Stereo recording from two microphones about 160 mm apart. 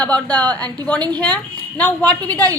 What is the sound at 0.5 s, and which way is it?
Speech, 25° right (ahead or behind).